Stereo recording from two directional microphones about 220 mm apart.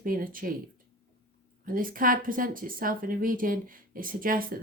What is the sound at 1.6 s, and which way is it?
Speech, 40° right (ahead or behind).